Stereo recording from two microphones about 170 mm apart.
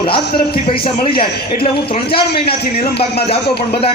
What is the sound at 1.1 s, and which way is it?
Speech, 60° left (ahead or behind).